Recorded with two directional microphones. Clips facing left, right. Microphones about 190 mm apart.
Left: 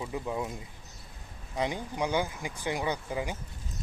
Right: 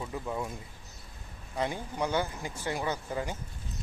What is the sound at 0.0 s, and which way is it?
Speech, 10° left (ahead or behind).